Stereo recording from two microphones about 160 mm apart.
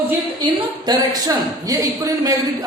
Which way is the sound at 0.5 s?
25° right (ahead or behind).